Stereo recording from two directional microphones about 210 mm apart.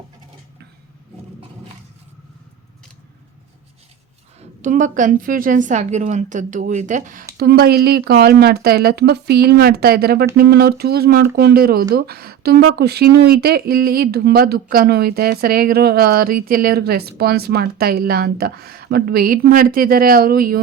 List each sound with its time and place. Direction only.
4.4 s a woman's voice: 35° right (ahead or behind)
7.3 s speech: 45° right (ahead or behind)